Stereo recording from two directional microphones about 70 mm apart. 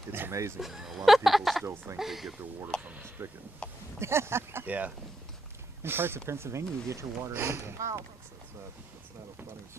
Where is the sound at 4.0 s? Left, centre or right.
Right.